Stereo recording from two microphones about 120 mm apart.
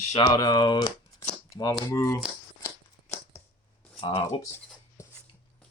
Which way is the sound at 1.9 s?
30° left (ahead or behind).